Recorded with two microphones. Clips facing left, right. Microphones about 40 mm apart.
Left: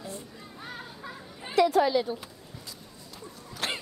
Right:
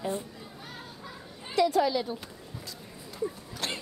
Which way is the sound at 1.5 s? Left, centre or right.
Left.